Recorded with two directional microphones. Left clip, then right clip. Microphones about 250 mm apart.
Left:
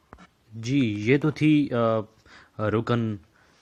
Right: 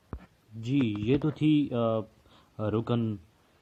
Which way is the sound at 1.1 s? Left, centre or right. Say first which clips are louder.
Left 6 dB; left.